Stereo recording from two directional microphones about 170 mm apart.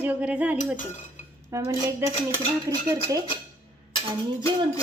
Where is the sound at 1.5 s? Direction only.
20° right (ahead or behind).